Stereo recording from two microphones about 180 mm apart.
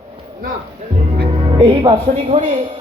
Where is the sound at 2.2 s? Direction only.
40° right (ahead or behind).